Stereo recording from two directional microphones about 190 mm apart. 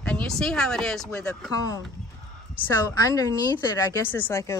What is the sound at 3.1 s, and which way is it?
Speech, 20° left (ahead or behind).